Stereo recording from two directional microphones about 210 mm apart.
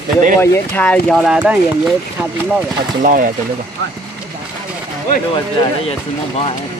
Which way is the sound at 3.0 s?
40° right (ahead or behind).